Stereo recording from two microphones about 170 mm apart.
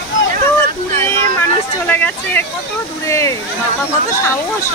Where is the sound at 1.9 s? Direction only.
10° left (ahead or behind).